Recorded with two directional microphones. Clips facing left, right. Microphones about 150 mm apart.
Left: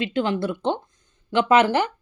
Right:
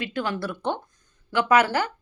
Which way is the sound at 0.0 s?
25° left (ahead or behind).